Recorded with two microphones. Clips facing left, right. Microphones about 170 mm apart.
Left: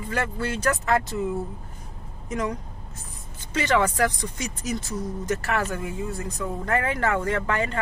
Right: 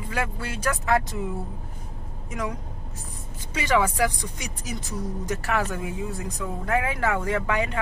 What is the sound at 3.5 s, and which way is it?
Speech, 10° right (ahead or behind).